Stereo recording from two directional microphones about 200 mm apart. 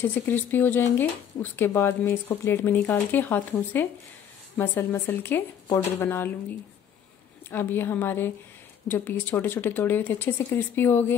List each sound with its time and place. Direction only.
0.0 s speech: 10° left (ahead or behind)
7.5 s speech: 10° left (ahead or behind)